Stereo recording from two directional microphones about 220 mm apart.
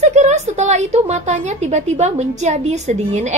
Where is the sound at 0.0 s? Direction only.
30° right (ahead or behind).